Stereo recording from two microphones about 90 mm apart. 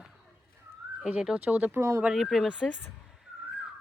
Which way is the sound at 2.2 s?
Centre (ahead or behind).